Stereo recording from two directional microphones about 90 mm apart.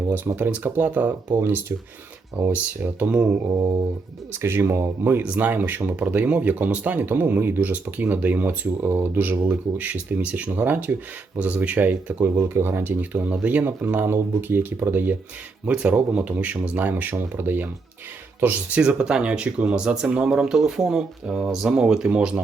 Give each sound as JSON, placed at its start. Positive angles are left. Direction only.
{"t": 0.3, "sound": "speech", "side_deg": -20}
{"t": 1.4, "sound": "speech", "side_deg": -25}
{"t": 4.4, "sound": "speech", "side_deg": -25}
{"t": 5.2, "sound": "speech", "side_deg": -15}
{"t": 12.2, "sound": "speech", "side_deg": -30}